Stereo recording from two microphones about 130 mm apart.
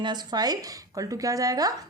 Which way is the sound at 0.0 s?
35° right (ahead or behind).